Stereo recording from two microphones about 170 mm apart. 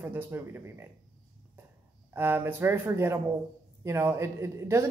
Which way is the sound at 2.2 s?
15° right (ahead or behind).